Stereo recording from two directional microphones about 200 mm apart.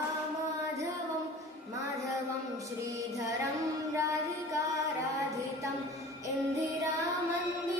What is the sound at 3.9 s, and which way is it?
Music, 15° right (ahead or behind).